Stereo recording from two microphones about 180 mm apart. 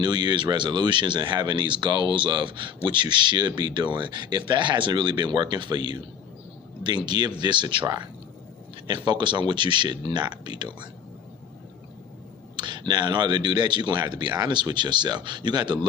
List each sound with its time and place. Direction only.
0.0 s speech: 25° right (ahead or behind)
12.5 s speech: 25° right (ahead or behind)